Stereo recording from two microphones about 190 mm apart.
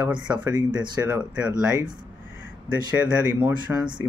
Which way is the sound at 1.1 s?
5° right (ahead or behind).